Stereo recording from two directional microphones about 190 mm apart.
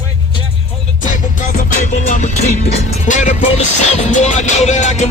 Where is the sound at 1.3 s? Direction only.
40° left (ahead or behind).